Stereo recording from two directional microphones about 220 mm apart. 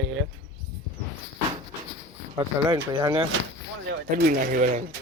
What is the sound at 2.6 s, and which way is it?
Speech, 15° right (ahead or behind).